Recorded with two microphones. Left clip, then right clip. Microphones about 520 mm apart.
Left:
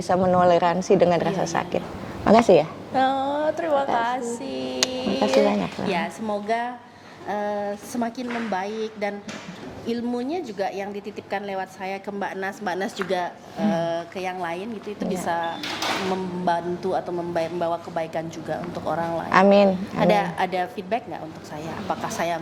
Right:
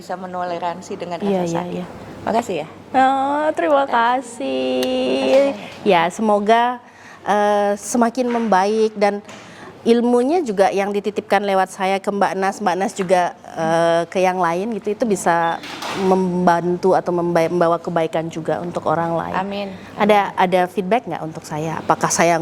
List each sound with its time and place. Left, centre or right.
0.1 s a woman's voice: left
2.2 s a woman's voice: left
2.9 s speech: centre
5.9 s a woman's voice: right
13.7 s a woman's voice: right
19.3 s a woman's voice: left
20.0 s a woman's voice: right